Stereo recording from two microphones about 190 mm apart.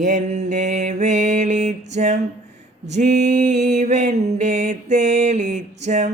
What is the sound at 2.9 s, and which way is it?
Mantra, 40° right (ahead or behind).